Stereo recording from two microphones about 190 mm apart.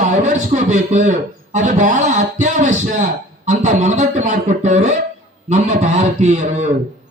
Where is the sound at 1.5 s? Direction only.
40° right (ahead or behind).